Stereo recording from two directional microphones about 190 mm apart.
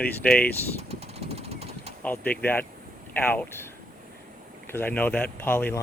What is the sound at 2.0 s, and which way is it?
Speech, 10° left (ahead or behind).